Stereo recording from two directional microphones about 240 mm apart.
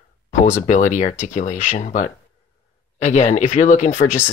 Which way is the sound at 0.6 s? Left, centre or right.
Left.